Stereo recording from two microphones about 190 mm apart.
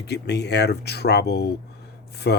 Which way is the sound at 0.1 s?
60° left (ahead or behind).